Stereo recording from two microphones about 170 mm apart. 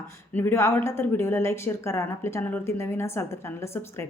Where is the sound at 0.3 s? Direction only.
15° left (ahead or behind).